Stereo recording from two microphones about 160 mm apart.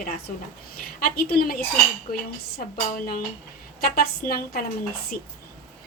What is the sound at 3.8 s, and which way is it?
A woman's voice, 65° left (ahead or behind).